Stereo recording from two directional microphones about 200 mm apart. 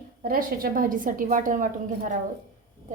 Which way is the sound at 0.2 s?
45° right (ahead or behind).